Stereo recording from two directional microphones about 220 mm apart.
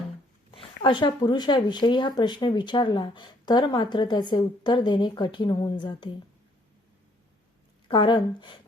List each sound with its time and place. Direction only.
0.5 s speech: 20° left (ahead or behind)
7.9 s speech: 20° left (ahead or behind)